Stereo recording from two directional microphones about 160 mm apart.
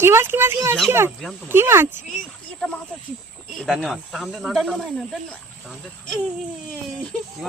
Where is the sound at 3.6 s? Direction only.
5° right (ahead or behind).